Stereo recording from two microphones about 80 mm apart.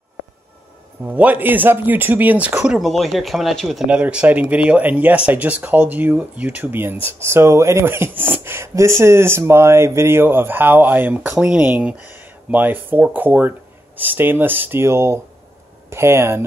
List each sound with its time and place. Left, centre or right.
1.0 s speech: centre
2.8 s speech: centre
3.8 s speech: centre
11.2 s speech: centre
11.6 s speech: right